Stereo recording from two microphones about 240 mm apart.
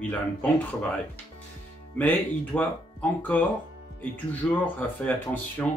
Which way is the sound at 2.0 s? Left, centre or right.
Centre.